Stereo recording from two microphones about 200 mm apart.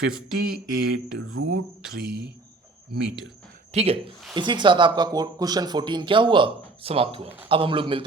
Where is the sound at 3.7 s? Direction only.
30° right (ahead or behind).